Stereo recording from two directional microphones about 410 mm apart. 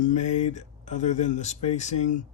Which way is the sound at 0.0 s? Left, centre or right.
Centre.